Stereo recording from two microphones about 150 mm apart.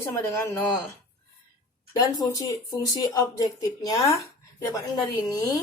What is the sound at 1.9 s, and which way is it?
Speech, 25° left (ahead or behind).